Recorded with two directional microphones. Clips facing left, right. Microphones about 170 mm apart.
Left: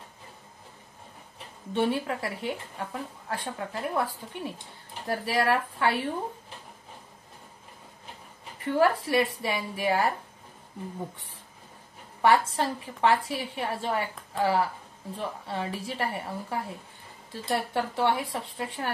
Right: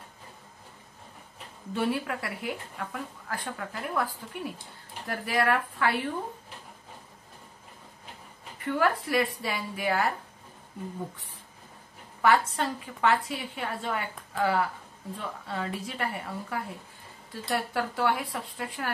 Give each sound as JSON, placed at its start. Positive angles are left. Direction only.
{"t": 1.7, "sound": "a woman's voice", "side_deg": 30}
{"t": 8.6, "sound": "a woman's voice", "side_deg": 30}
{"t": 12.2, "sound": "a woman's voice", "side_deg": 30}